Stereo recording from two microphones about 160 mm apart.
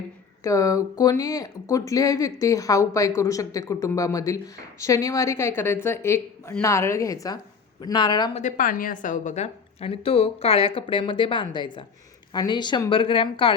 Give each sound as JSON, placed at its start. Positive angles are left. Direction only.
{"t": 0.4, "sound": "a woman's voice", "side_deg": 20}
{"t": 8.4, "sound": "a woman's voice", "side_deg": 55}